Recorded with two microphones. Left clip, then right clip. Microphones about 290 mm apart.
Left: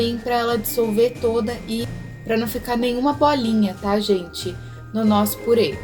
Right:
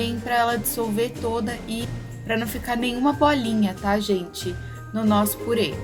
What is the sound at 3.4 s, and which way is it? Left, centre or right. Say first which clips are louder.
Speech: left 2 dB; right.